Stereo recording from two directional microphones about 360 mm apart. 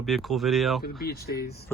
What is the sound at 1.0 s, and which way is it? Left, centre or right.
Speech, left.